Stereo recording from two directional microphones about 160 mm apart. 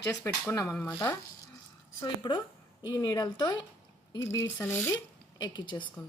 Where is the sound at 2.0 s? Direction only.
30° left (ahead or behind).